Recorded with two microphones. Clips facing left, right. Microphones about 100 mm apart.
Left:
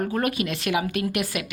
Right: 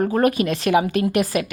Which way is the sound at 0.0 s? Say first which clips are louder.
Right 7 dB; 35° right (ahead or behind).